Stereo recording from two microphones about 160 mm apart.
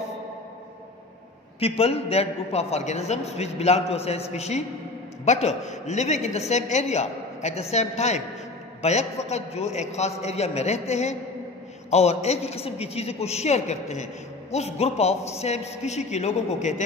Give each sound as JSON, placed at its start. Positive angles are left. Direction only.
{"t": 1.6, "sound": "a man's voice", "side_deg": 40}